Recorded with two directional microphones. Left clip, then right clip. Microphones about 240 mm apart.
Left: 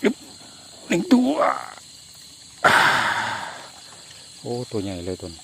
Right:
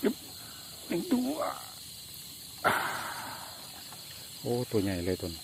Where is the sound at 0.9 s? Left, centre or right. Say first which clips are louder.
Left 12 dB; left.